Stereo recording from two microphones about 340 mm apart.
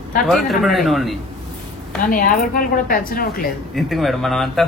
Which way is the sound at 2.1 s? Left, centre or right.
Left.